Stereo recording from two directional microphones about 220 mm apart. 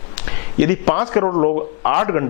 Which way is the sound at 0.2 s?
15° left (ahead or behind).